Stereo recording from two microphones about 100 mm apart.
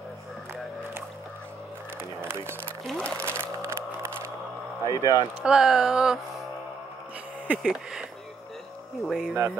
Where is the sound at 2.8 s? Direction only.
5° left (ahead or behind).